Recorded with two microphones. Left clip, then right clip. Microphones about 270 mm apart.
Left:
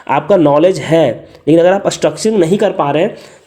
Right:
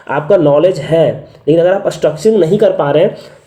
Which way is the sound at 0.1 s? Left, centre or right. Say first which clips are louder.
Even; left.